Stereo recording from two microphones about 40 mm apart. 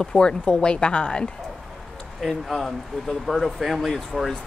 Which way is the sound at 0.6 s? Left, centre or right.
Left.